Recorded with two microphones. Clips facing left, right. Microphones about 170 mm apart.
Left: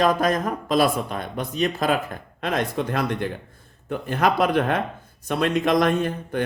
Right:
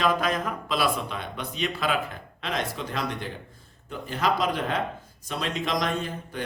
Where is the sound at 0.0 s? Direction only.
45° left (ahead or behind).